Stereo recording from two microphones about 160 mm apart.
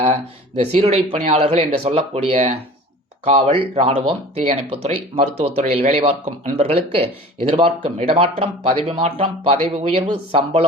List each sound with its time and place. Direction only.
0.0 s speech: 40° right (ahead or behind)